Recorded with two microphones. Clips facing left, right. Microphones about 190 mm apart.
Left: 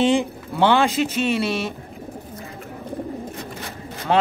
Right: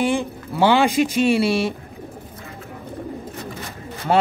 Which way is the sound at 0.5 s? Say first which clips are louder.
Right 2 dB; 5° right (ahead or behind).